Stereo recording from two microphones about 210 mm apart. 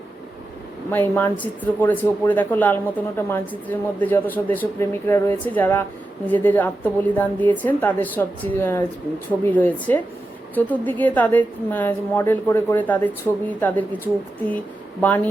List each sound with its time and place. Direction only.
0.9 s speech: 10° left (ahead or behind)